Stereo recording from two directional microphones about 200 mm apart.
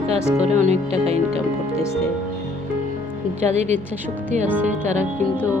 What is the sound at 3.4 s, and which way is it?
Speech, 35° right (ahead or behind).